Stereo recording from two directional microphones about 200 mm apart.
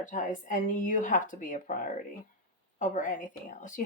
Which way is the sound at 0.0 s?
40° left (ahead or behind).